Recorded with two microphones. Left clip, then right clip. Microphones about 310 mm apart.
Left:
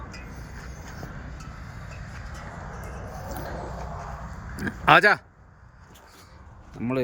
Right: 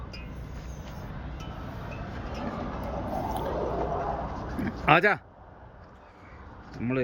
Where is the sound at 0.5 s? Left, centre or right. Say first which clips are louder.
Left 2 dB; centre.